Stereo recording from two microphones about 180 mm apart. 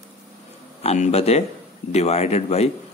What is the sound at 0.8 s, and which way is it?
A man's voice, 35° left (ahead or behind).